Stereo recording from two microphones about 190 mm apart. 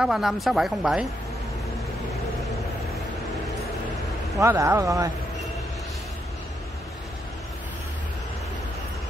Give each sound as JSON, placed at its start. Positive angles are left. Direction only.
{"t": 0.0, "sound": "speech", "side_deg": 0}
{"t": 4.4, "sound": "speech", "side_deg": -15}